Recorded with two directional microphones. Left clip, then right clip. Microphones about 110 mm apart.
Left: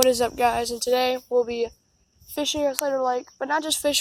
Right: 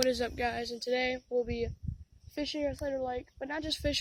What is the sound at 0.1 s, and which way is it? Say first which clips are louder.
Speech: left 11 dB; 25° right (ahead or behind).